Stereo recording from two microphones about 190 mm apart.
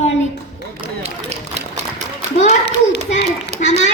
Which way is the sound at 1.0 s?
35° right (ahead or behind).